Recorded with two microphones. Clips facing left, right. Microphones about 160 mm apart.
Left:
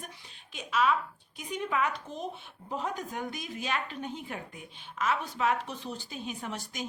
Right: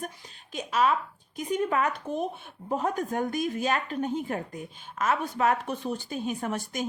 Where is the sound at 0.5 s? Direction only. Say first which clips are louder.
Right 3 dB; 40° right (ahead or behind).